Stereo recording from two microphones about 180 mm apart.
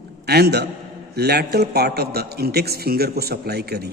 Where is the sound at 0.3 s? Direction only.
65° right (ahead or behind).